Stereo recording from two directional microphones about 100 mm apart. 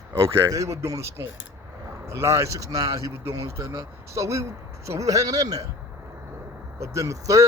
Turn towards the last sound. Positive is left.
turn(degrees=-30)  # may be behind; listen again after turning